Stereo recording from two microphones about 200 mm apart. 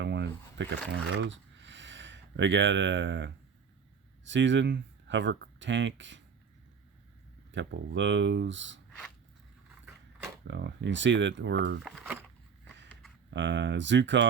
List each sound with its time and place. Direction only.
0.0 s a sound: 60° right (ahead or behind)
1.0 s speech: 65° right (ahead or behind)
7.5 s speech: 65° right (ahead or behind)
9.8 s a sound: 10° right (ahead or behind)
10.4 s speech: 65° right (ahead or behind)
11.8 s speech: centre (ahead or behind)
13.3 s speech: 65° right (ahead or behind)